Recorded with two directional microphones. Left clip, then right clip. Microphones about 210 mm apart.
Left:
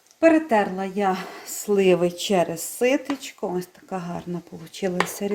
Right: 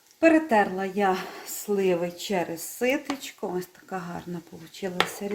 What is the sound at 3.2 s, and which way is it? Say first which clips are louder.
Speech: left 3 dB; 10° left (ahead or behind).